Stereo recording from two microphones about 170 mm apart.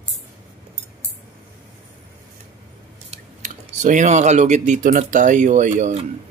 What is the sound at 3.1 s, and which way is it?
Speech, 45° right (ahead or behind).